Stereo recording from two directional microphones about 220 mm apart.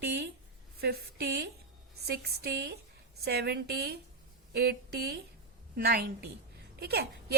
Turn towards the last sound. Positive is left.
turn(degrees=-45)  # may be behind; listen again after turning